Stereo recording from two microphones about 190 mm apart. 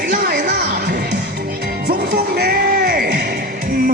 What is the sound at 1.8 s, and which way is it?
Music, 60° right (ahead or behind).